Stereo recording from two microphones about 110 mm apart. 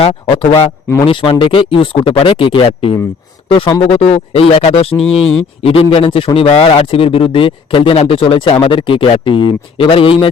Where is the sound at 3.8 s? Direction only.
70° left (ahead or behind).